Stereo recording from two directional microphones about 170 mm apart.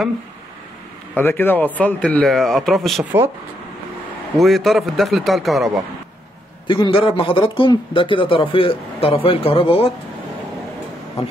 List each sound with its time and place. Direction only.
1.1 s speech: 10° left (ahead or behind)
4.4 s speech: centre (ahead or behind)
6.7 s speech: 30° left (ahead or behind)